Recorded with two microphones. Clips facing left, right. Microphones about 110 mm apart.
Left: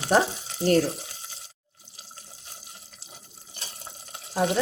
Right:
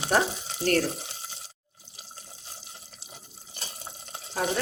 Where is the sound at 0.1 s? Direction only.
25° left (ahead or behind).